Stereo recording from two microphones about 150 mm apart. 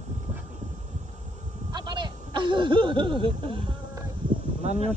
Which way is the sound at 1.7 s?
30° right (ahead or behind).